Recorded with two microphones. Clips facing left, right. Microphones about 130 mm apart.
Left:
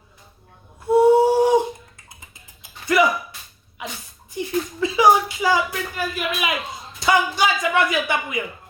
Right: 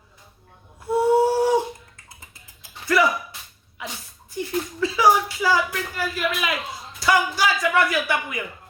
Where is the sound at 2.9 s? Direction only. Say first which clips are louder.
Left 2 dB; 20° left (ahead or behind).